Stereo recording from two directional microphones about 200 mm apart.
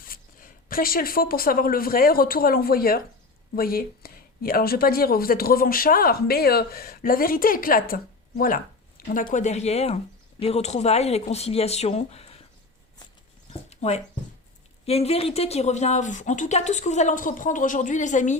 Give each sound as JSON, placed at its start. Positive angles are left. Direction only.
{"t": 0.0, "sound": "speech", "side_deg": 45}
{"t": 9.0, "sound": "a sound", "side_deg": 45}
{"t": 9.3, "sound": "speech", "side_deg": 35}
{"t": 13.5, "sound": "dog", "side_deg": 35}
{"t": 14.8, "sound": "speech", "side_deg": 30}